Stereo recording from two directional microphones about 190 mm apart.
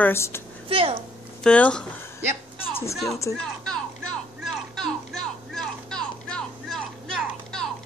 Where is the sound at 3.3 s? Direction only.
15° left (ahead or behind).